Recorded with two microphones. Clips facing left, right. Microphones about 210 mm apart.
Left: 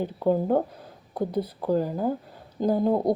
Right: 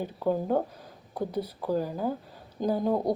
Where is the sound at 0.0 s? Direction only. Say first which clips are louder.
Left 4 dB; 15° left (ahead or behind).